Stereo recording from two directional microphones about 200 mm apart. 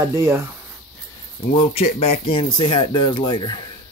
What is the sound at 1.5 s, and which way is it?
Speech, 30° left (ahead or behind).